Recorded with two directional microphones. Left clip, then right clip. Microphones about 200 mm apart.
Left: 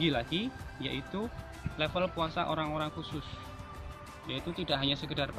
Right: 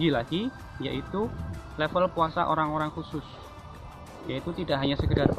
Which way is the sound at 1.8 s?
20° left (ahead or behind).